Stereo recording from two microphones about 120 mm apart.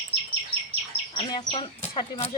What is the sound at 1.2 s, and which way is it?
Speech, 40° left (ahead or behind).